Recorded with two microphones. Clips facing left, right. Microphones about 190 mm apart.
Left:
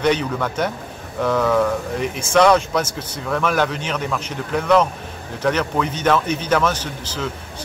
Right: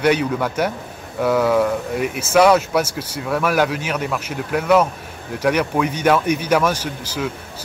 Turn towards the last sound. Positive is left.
turn(degrees=-10)  # may be behind; listen again after turning